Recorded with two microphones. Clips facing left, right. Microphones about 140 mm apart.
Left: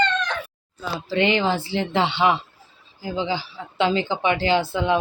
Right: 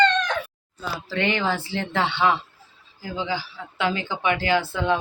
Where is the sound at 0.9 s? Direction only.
20° left (ahead or behind).